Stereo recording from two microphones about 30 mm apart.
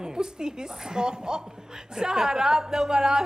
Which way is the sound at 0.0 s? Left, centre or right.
Right.